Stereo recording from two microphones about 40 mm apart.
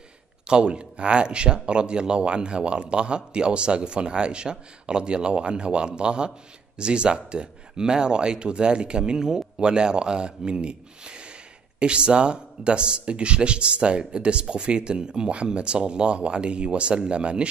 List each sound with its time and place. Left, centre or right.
0.5 s speech: right